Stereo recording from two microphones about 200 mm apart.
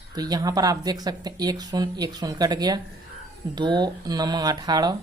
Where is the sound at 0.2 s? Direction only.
20° right (ahead or behind).